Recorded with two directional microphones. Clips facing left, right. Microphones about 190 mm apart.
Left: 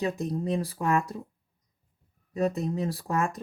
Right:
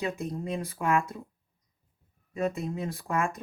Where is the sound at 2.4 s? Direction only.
35° left (ahead or behind).